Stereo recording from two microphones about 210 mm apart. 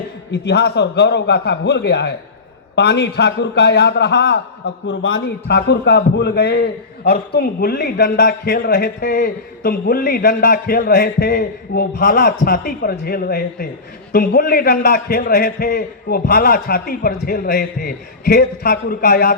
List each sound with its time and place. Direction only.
0.3 s a man's voice: 55° left (ahead or behind)